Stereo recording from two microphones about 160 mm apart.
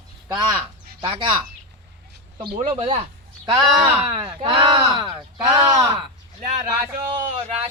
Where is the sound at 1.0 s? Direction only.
30° right (ahead or behind).